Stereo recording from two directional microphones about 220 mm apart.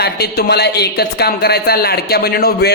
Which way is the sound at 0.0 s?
45° left (ahead or behind).